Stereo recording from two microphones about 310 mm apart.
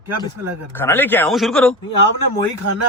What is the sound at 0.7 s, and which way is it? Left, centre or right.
Speech, centre.